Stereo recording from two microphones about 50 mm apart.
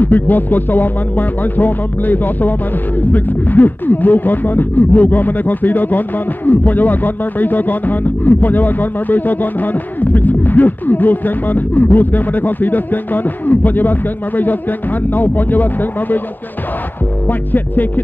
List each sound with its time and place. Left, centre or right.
0.0 s speech: left
17.3 s speech: left